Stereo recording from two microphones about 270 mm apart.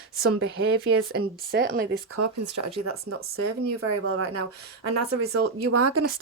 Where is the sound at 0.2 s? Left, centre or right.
Right.